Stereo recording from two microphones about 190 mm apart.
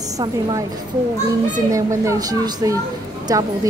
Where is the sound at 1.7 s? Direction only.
15° right (ahead or behind).